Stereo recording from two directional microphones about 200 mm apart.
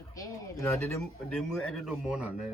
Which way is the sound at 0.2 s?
15° left (ahead or behind).